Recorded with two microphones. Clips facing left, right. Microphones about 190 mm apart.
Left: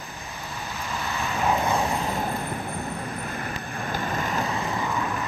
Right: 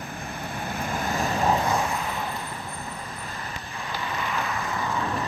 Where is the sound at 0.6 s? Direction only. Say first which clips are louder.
Right 3 dB; 55° right (ahead or behind); by 1.5 s 40° right (ahead or behind).